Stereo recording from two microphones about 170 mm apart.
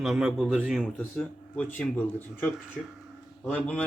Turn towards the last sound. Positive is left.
turn(degrees=5)  # may be behind; listen again after turning